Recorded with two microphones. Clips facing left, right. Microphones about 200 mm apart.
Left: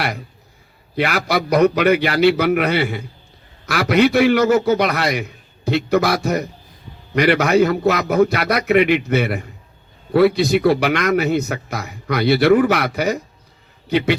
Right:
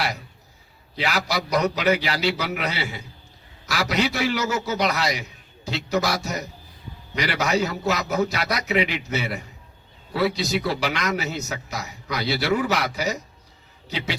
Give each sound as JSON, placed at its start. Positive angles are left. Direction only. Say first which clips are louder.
{"t": 0.9, "sound": "a man's voice", "louder": "left 6 dB", "side_deg": 55}